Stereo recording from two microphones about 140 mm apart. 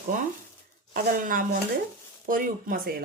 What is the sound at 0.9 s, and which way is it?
Speech, 85° right.